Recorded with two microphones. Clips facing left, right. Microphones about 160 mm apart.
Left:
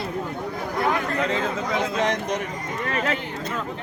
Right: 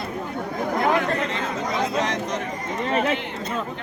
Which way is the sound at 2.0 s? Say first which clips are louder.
Left 2 dB; 55° left (ahead or behind).